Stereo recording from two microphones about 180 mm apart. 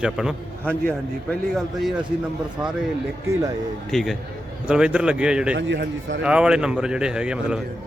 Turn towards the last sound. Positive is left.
turn(degrees=-5)  # may be behind; listen again after turning